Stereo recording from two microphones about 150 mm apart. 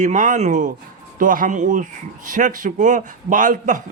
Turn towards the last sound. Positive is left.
turn(degrees=-60)  # may be behind; listen again after turning